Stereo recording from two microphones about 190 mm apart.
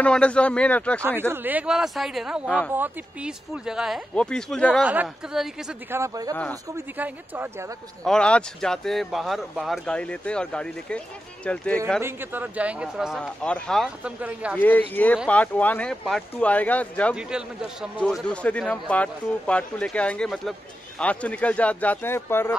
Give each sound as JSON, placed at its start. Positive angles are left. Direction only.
{"t": 0.0, "sound": "speech", "side_deg": 5}
{"t": 1.3, "sound": "speech", "side_deg": -10}
{"t": 5.9, "sound": "speech", "side_deg": -15}
{"t": 8.0, "sound": "speech", "side_deg": 5}
{"t": 12.0, "sound": "speech", "side_deg": -10}
{"t": 14.5, "sound": "speech", "side_deg": 10}